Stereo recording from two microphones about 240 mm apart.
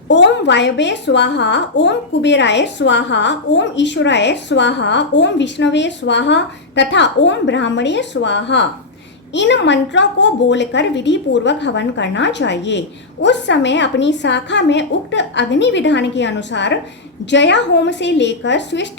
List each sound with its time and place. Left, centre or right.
0.1 s a woman's voice: left